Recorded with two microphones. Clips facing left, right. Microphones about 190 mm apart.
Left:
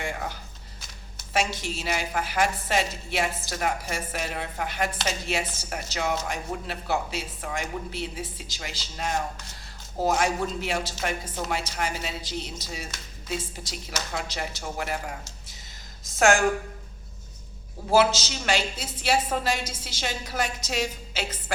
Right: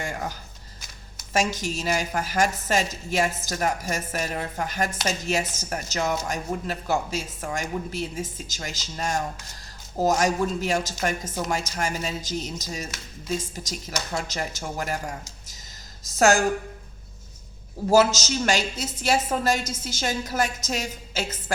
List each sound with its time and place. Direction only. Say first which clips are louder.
0.0 s a sound: right 1 dB; 40° right (ahead or behind)
1.3 s a woman's voice: right 2 dB; 45° right (ahead or behind)
17.9 s a woman's voice: right 2 dB; 45° right (ahead or behind)